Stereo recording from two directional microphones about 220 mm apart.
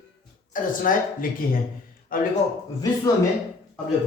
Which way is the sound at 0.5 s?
40° left (ahead or behind).